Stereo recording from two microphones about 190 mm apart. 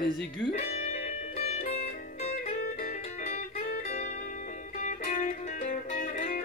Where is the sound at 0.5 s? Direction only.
35° left (ahead or behind).